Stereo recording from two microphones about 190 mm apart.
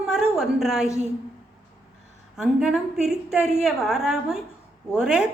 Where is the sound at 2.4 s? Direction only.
5° right (ahead or behind).